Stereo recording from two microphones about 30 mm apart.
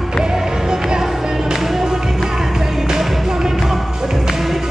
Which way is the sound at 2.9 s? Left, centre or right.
Centre.